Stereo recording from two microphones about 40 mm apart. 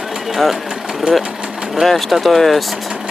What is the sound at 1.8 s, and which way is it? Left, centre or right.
Speech, centre.